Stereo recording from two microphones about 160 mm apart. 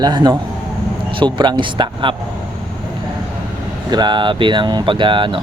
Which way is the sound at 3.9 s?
25° right (ahead or behind).